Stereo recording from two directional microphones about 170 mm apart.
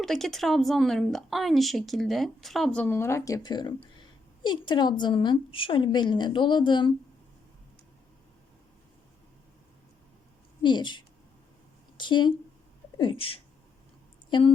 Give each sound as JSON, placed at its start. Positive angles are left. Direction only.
{"t": 0.0, "sound": "a woman's voice", "side_deg": 0}
{"t": 10.6, "sound": "a woman's voice", "side_deg": 25}